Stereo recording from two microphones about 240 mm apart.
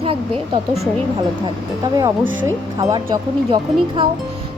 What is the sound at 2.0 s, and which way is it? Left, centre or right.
Speech, centre.